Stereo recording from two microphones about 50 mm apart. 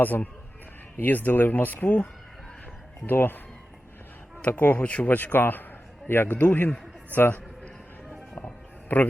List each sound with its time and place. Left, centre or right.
0.0 s speech: left
3.1 s speech: left
4.4 s speech: left
5.0 s speech: left
6.4 s a man's voice: left
8.9 s speech: left